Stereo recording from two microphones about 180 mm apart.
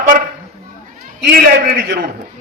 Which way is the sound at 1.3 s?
60° right (ahead or behind).